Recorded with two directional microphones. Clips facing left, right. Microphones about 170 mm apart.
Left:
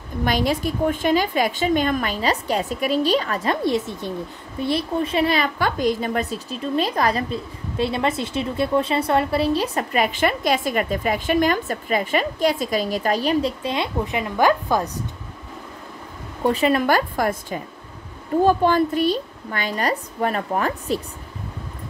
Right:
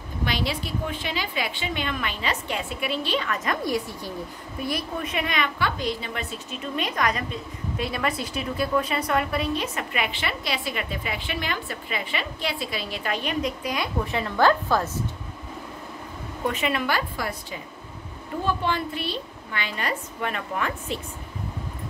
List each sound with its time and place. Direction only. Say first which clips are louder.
0.2 s a woman's voice: left 7 dB; 45° left (ahead or behind); by 14.9 s 15° left (ahead or behind)
16.4 s a woman's voice: left 7 dB; 35° left (ahead or behind)